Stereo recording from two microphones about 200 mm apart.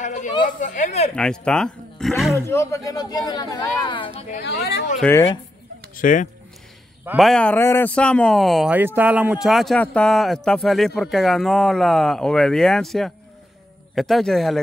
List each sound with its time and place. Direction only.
0.0 s speech: 40° left (ahead or behind)
1.1 s speech: 5° left (ahead or behind)
2.3 s speech: 15° left (ahead or behind); by 4.4 s 30° left (ahead or behind)
4.4 s speech: 55° left (ahead or behind)
5.0 s speech: 5° left (ahead or behind)
5.9 s speech: 40° left (ahead or behind)
7.1 s speech: centre (ahead or behind)